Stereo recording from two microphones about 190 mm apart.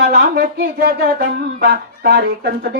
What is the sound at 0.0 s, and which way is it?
Speech, 60° right (ahead or behind).